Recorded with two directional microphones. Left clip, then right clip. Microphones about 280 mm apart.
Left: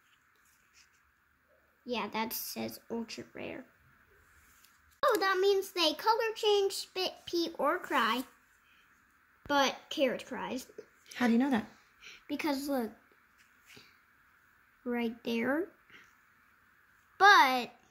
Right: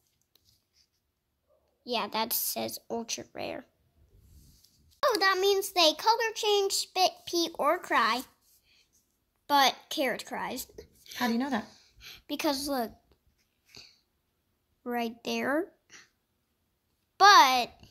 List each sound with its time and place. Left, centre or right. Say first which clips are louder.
1.9 s a woman's voice: right 4 dB; centre
5.0 s a child's voice: right 3 dB; centre
9.5 s a woman's voice: right 5 dB; right
11.1 s a woman's voice: even; centre
12.0 s a child's voice: right 4 dB; centre
14.8 s a child's voice: right 3 dB; centre
17.2 s a child's voice: right 4 dB; centre